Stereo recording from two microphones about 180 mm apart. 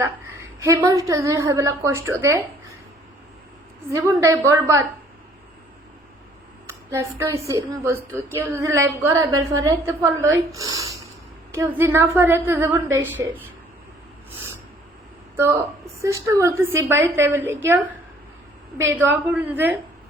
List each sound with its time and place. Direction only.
0.6 s speech: 15° right (ahead or behind)
3.9 s speech: 15° right (ahead or behind)
6.7 s speech: 15° right (ahead or behind)
15.4 s speech: 15° right (ahead or behind)
18.8 s speech: 15° right (ahead or behind)